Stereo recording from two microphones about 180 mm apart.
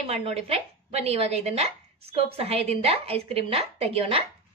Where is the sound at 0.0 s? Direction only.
35° right (ahead or behind).